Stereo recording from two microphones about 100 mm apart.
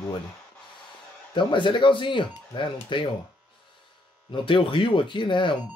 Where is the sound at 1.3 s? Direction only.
55° left (ahead or behind).